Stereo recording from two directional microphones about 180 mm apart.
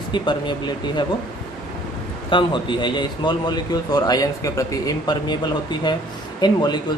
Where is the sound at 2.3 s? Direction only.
25° left (ahead or behind).